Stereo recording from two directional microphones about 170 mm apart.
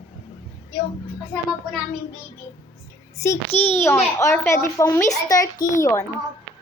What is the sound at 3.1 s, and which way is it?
Speech, 15° left (ahead or behind).